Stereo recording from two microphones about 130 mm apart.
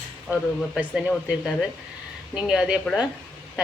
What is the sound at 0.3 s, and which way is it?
Speech, 15° right (ahead or behind).